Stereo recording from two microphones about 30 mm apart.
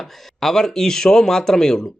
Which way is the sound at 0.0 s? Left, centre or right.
Centre.